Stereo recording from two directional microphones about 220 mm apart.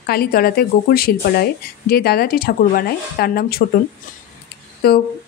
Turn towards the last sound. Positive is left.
turn(degrees=45)  # may be behind; listen again after turning